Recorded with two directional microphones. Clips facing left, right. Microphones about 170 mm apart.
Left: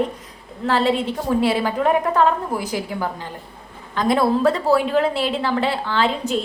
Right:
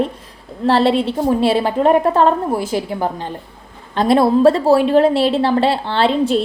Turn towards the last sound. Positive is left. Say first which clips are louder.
# right 6 dB
turn(degrees=-30)  # may be behind; listen again after turning